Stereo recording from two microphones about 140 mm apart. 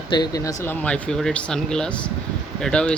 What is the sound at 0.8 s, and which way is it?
Speech, 5° left (ahead or behind).